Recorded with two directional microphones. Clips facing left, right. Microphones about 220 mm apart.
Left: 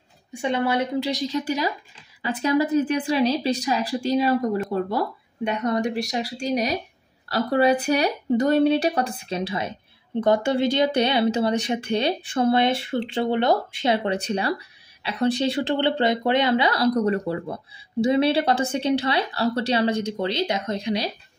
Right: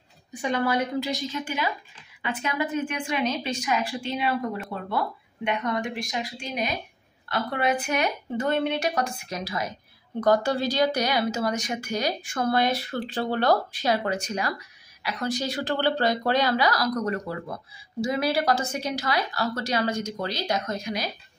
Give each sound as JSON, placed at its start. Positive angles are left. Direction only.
{"t": 0.3, "sound": "a woman's voice", "side_deg": 25}